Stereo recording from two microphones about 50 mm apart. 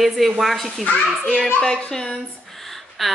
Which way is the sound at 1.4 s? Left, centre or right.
Centre.